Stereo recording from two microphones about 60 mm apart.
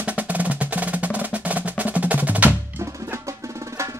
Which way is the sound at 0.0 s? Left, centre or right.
Right.